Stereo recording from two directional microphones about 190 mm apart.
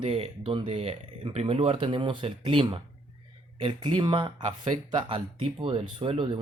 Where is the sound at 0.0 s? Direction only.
30° right (ahead or behind).